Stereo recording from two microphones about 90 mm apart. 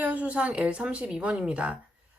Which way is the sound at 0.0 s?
15° right (ahead or behind).